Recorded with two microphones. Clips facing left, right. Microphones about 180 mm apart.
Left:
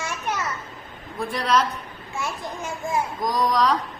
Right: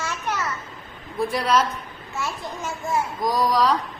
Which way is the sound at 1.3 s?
Centre (ahead or behind).